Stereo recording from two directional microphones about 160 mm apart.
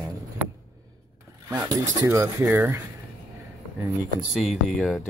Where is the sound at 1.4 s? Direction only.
20° right (ahead or behind).